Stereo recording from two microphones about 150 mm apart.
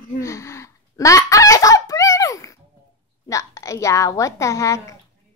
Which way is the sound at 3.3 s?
20° left (ahead or behind).